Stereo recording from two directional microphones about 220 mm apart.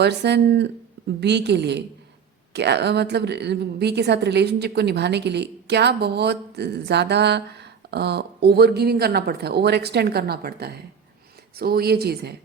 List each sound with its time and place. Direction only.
0.0 s a woman's voice: 50° right (ahead or behind)